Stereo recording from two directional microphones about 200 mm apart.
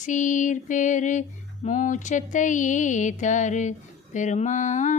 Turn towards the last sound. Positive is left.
turn(degrees=40)  # may be behind; listen again after turning